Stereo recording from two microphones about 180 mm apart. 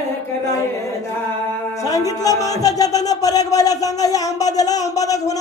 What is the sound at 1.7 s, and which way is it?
Speech, 20° left (ahead or behind).